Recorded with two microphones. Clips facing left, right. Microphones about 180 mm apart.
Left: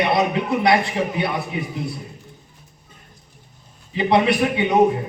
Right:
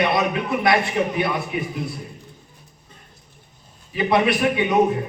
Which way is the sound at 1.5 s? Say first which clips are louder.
Right 1 dB; 25° left (ahead or behind).